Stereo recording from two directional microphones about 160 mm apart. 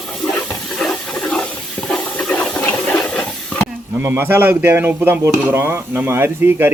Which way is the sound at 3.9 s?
15° right (ahead or behind).